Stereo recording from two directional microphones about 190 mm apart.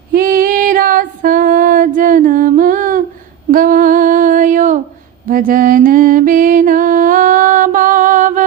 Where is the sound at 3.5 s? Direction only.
45° right (ahead or behind).